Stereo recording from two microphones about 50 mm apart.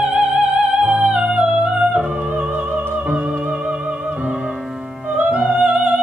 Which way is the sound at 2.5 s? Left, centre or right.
Right.